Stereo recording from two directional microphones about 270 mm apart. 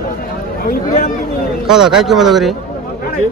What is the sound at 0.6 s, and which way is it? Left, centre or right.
Speech, left.